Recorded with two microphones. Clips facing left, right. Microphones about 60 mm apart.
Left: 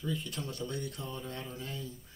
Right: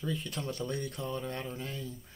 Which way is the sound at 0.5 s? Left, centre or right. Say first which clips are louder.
Right 4 dB; right.